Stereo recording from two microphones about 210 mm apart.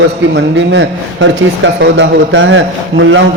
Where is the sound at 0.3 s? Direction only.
60° right (ahead or behind).